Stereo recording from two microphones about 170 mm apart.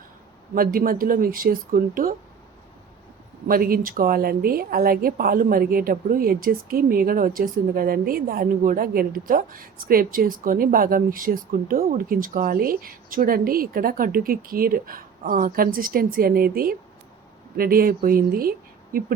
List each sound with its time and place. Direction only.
0.5 s a woman's voice: 55° right (ahead or behind)
3.4 s a woman's voice: 60° right (ahead or behind)